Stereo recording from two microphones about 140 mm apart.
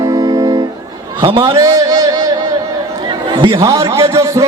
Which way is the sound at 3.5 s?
20° right (ahead or behind).